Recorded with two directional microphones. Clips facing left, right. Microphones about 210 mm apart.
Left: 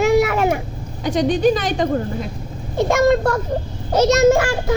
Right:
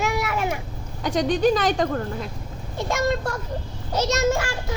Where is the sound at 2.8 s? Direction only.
70° left (ahead or behind).